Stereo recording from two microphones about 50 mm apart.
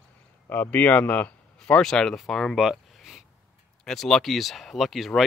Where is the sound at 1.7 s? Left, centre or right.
Centre.